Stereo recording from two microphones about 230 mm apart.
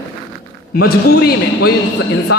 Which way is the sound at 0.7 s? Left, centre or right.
Left.